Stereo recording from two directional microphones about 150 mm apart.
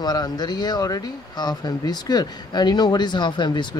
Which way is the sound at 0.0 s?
25° left (ahead or behind).